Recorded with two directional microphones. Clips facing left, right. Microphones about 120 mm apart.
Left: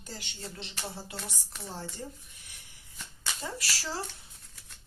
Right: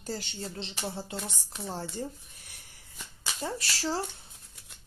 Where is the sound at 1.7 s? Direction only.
40° right (ahead or behind).